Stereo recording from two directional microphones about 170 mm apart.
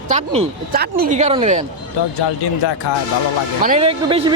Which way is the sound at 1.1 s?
40° right (ahead or behind).